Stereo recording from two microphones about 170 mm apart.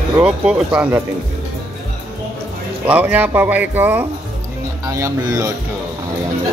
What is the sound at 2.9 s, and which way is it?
Speech, 10° right (ahead or behind).